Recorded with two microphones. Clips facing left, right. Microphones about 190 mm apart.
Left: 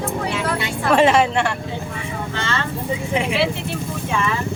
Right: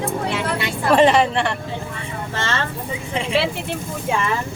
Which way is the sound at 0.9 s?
Centre (ahead or behind).